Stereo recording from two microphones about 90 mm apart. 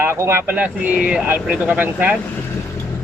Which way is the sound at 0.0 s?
30° right (ahead or behind).